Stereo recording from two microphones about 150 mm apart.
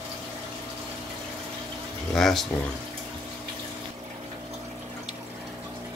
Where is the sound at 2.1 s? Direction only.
Centre (ahead or behind).